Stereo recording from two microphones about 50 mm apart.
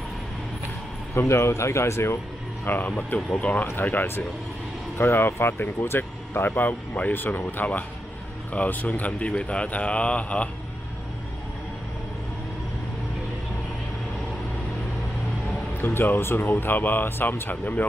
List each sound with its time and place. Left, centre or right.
1.1 s speech: left
2.6 s speech: left
3.3 s speech: left
3.6 s speech: left
15.8 s speech: left